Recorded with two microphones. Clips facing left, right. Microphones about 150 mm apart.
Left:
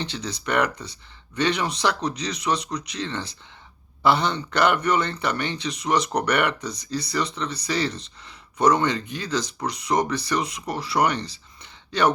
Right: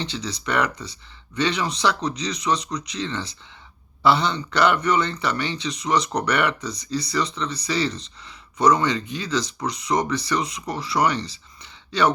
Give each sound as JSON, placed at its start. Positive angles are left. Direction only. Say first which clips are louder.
{"t": 0.0, "sound": "speech", "louder": "right 1 dB", "side_deg": 55}